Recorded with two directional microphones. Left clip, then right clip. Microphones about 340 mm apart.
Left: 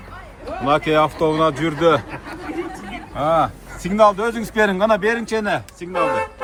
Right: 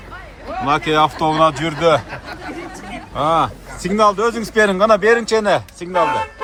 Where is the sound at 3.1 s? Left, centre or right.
Centre.